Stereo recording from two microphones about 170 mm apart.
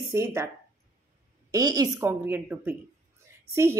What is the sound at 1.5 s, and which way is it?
A woman's voice, 20° right (ahead or behind).